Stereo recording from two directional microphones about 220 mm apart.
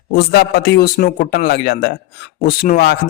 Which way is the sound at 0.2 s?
45° left (ahead or behind).